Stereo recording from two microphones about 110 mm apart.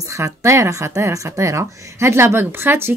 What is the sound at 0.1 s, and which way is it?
Speech, 30° right (ahead or behind).